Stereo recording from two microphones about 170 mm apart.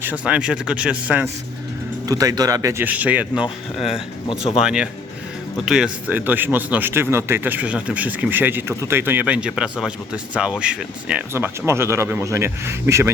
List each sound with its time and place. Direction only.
0.0 s speech: 10° right (ahead or behind)
2.0 s speech: 20° right (ahead or behind)